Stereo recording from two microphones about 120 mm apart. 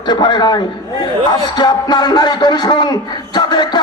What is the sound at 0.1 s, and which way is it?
A man's voice, 35° left (ahead or behind).